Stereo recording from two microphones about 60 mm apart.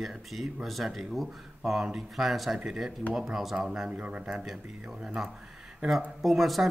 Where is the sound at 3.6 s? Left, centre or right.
Centre.